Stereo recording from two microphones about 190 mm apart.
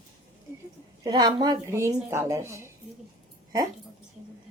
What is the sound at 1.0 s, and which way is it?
A woman's voice, 20° right (ahead or behind).